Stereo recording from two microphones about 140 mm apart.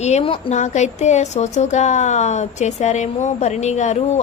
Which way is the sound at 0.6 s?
60° left (ahead or behind).